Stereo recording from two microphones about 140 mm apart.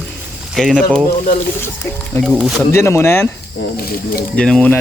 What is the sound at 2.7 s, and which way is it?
Speech, 20° left (ahead or behind).